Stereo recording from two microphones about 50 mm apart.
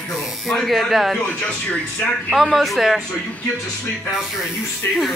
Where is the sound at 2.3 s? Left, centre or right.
Centre.